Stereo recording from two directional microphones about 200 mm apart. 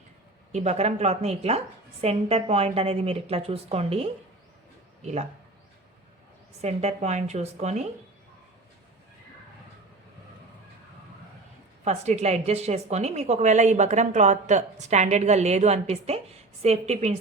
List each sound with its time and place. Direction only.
0.5 s a woman's voice: 35° right (ahead or behind)
6.6 s a woman's voice: 30° right (ahead or behind)
11.9 s a woman's voice: 35° right (ahead or behind)